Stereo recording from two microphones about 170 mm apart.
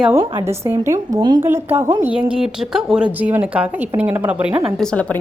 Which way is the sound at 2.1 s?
5° right (ahead or behind).